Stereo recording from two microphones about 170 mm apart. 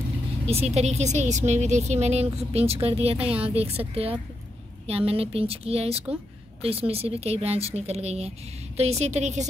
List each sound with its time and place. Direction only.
0.5 s a woman's voice: 40° right (ahead or behind)